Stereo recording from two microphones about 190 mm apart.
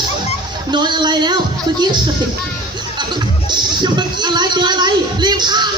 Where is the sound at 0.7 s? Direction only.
25° right (ahead or behind).